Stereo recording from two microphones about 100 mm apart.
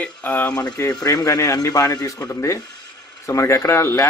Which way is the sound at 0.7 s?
35° left (ahead or behind).